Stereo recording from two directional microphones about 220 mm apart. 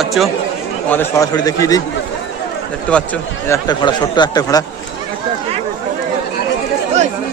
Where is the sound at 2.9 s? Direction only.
10° left (ahead or behind).